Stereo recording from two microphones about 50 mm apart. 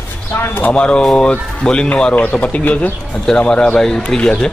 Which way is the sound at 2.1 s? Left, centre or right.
Left.